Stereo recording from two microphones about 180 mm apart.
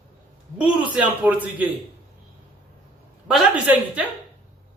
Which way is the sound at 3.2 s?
5° right (ahead or behind).